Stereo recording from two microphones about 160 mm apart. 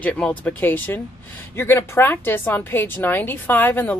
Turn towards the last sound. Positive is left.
turn(degrees=10)  # may be behind; listen again after turning